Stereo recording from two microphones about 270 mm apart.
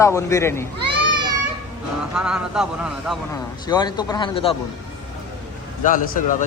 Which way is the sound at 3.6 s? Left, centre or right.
Centre.